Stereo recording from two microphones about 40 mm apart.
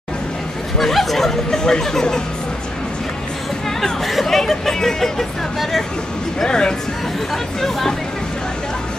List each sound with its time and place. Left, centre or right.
0.7 s speech: centre
3.8 s speech: centre
6.4 s speech: left